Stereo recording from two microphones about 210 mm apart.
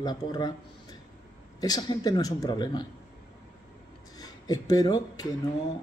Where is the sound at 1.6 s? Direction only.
20° left (ahead or behind).